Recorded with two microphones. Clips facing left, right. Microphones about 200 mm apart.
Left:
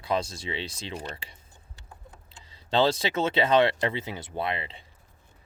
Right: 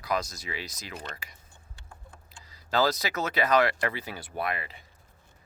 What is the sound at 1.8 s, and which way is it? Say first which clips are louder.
Speech: left 2 dB; 20° left (ahead or behind).